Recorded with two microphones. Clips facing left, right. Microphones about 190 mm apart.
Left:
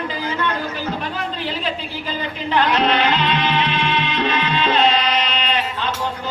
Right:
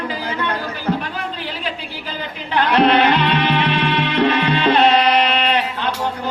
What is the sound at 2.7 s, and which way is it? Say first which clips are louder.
Music: right 4 dB; 65° right (ahead or behind).